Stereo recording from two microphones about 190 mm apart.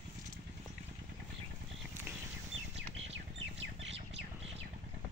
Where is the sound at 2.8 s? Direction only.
70° right (ahead or behind).